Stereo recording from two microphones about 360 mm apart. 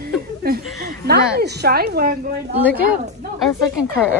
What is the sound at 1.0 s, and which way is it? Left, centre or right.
Speech, right.